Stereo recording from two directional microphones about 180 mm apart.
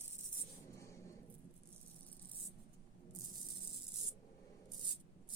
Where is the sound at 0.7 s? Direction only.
15° left (ahead or behind).